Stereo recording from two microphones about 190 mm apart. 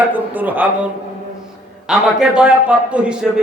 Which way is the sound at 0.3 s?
10° right (ahead or behind).